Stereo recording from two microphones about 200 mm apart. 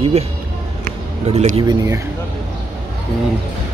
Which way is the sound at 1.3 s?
35° right (ahead or behind).